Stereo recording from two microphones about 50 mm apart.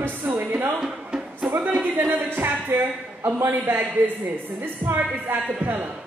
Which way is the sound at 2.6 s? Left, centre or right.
Right.